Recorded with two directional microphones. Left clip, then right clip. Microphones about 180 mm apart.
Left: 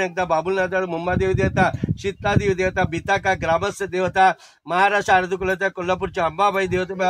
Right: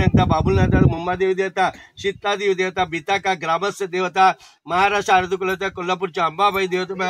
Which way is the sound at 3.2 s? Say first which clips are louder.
Even; 25° left (ahead or behind).